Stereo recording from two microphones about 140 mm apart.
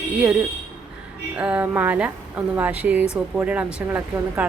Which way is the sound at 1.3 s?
10° right (ahead or behind).